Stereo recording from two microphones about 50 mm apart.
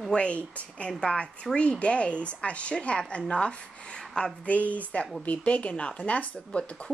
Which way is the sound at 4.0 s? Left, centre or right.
Centre.